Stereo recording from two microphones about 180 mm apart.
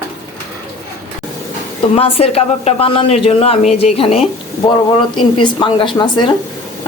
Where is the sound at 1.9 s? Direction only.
30° left (ahead or behind).